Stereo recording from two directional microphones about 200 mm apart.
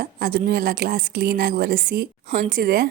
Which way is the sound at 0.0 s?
50° right (ahead or behind).